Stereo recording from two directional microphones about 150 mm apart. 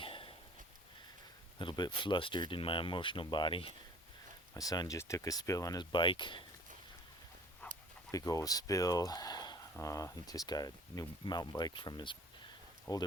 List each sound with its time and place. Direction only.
0.0 s a sound: 35° left (ahead or behind)
1.5 s speech: 30° left (ahead or behind)
4.5 s speech: 25° left (ahead or behind)
8.1 s speech: 20° left (ahead or behind)
12.9 s speech: 20° left (ahead or behind)